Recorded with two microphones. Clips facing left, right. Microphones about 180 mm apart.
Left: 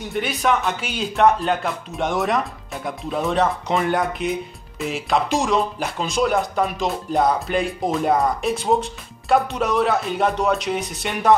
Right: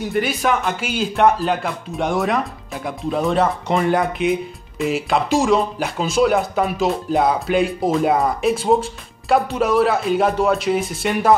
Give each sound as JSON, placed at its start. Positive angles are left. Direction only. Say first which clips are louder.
{"t": 0.0, "sound": "a man's voice", "louder": "right 3 dB", "side_deg": 0}